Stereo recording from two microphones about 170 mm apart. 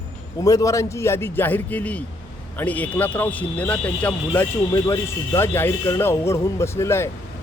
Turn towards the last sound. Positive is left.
turn(degrees=15)  # may be behind; listen again after turning